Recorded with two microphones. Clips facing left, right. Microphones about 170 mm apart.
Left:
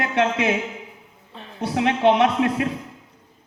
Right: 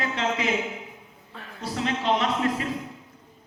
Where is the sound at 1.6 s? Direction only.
65° left (ahead or behind).